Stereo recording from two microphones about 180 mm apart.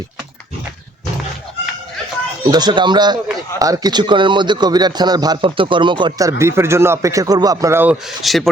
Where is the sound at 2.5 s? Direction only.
25° right (ahead or behind).